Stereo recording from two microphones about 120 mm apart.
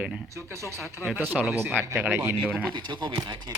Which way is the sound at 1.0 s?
5° left (ahead or behind).